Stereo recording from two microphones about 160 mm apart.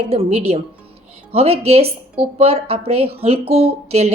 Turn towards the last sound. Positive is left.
turn(degrees=-40)  # may be behind; listen again after turning